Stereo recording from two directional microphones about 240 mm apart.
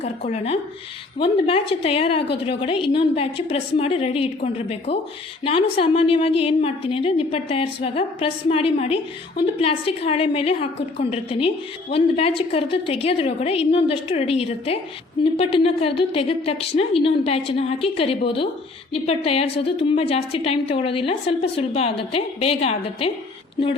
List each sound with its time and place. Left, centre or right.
0.0 s a woman's voice: left